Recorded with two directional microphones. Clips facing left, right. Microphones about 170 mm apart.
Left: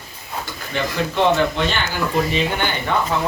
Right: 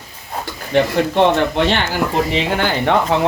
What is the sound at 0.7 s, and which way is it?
Speech, 65° right (ahead or behind).